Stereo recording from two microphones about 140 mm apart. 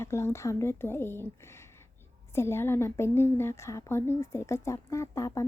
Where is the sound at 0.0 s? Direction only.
20° left (ahead or behind).